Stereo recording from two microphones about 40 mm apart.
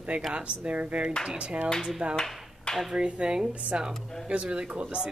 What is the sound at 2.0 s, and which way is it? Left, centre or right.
Speech, right.